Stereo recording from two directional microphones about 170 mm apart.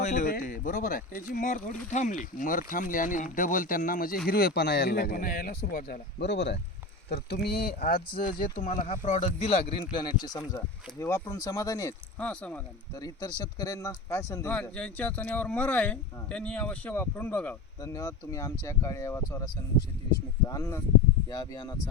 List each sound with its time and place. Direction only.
0.0 s speech: 45° left (ahead or behind); by 6.6 s 85° left
7.1 s speech: 70° left (ahead or behind); by 9.7 s 40° left (ahead or behind)
10.0 s speech: 25° left (ahead or behind)
12.2 s speech: 5° left (ahead or behind)
13.0 s speech: 25° left (ahead or behind)
14.5 s speech: 5° left (ahead or behind)
17.8 s speech: 20° left (ahead or behind)
20.5 s speech: 15° left (ahead or behind)